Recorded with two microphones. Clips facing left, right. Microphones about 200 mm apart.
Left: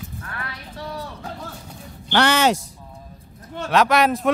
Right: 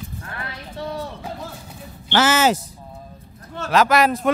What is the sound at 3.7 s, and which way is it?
Speech, centre (ahead or behind).